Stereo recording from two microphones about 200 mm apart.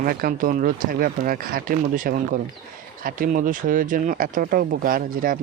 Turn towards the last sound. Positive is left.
turn(degrees=-45)  # may be behind; listen again after turning